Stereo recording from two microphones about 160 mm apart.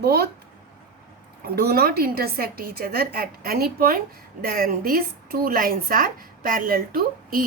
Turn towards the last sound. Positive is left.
turn(degrees=-65)  # may be behind; listen again after turning